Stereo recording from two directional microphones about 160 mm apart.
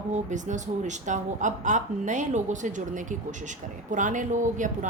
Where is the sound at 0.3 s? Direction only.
50° right (ahead or behind).